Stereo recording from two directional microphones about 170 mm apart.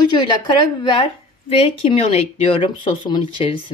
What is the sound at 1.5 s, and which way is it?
A woman's voice, 30° left (ahead or behind).